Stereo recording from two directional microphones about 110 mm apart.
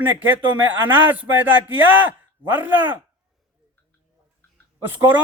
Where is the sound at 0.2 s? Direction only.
15° right (ahead or behind).